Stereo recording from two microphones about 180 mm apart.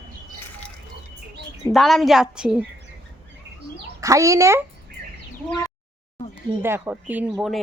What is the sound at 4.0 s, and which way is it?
Speech, 15° right (ahead or behind).